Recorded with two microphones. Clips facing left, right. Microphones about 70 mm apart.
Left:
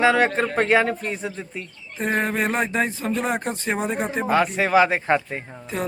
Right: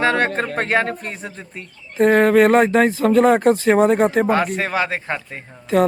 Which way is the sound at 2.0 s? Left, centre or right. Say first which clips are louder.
Right 10 dB; right.